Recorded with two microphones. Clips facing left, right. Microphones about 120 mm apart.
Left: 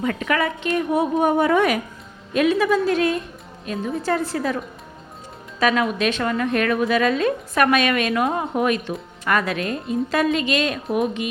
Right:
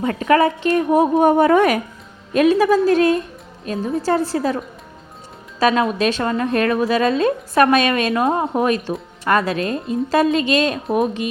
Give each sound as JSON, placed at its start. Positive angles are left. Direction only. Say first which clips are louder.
{"t": 0.0, "sound": "speech", "louder": "right 6 dB", "side_deg": -35}